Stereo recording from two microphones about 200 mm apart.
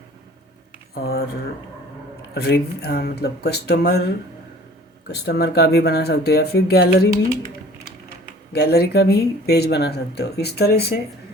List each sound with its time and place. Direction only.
0.9 s speech: 50° left (ahead or behind)
2.3 s speech: 55° left (ahead or behind)
8.5 s speech: 50° left (ahead or behind)